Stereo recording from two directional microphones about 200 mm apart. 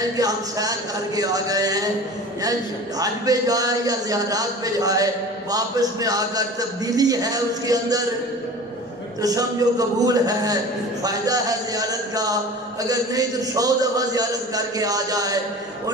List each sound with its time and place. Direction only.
0.2 s a man's voice: 20° right (ahead or behind)
3.0 s a man's voice: 20° right (ahead or behind)
9.2 s a man's voice: 20° right (ahead or behind)